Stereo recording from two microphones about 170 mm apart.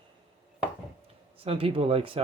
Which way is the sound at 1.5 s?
35° right (ahead or behind).